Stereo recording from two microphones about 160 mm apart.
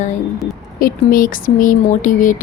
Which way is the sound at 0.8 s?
60° left (ahead or behind).